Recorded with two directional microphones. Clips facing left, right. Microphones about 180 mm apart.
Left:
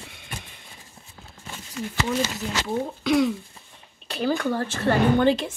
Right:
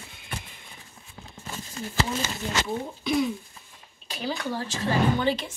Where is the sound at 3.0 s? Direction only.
90° left.